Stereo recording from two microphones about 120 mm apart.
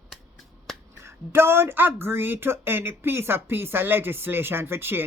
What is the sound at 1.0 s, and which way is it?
Speech, 20° right (ahead or behind).